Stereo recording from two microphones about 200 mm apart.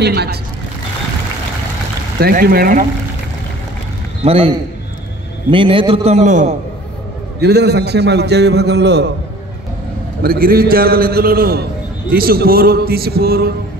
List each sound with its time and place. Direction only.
0.0 s a man's voice: 55° right (ahead or behind)
2.1 s a man's voice: 50° right (ahead or behind)
4.2 s a man's voice: 30° right (ahead or behind)
5.5 s a man's voice: 25° right (ahead or behind)
7.3 s a man's voice: 55° right (ahead or behind)
10.2 s a man's voice: 45° right (ahead or behind)